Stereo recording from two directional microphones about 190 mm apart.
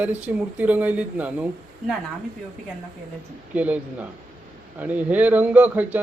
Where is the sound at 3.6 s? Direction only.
5° right (ahead or behind).